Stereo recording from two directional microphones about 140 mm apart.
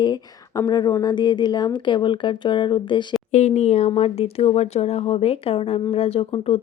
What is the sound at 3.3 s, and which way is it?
Speech, 55° left (ahead or behind).